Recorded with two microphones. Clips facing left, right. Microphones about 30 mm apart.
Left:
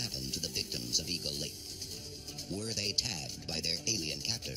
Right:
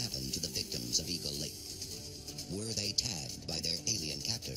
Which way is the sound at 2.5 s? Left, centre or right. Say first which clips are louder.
Left 2 dB; left.